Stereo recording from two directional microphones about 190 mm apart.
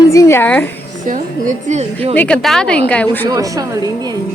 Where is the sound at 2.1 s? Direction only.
5° left (ahead or behind).